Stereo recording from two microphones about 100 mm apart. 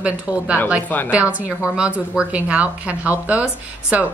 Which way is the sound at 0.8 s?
15° left (ahead or behind).